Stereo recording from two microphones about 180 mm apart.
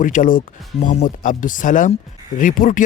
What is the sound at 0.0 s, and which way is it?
Speech, 45° left (ahead or behind).